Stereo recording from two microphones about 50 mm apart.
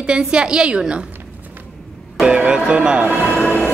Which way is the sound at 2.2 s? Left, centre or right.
Centre.